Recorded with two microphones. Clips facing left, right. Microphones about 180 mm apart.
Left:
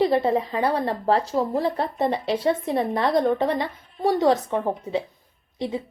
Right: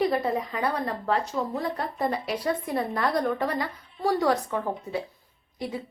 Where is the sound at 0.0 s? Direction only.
25° left (ahead or behind).